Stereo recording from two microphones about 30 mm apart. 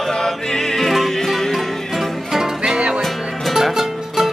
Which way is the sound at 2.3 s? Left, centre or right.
Centre.